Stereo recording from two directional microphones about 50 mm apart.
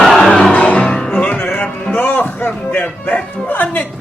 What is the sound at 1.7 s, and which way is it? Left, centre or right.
Music, left.